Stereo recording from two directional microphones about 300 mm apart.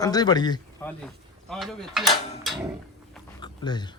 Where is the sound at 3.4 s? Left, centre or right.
Centre.